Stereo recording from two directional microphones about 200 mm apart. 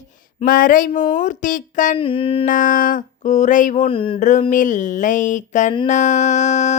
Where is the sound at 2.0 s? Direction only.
25° left (ahead or behind).